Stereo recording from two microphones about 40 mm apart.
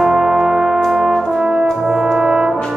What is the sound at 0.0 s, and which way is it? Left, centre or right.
Music, centre.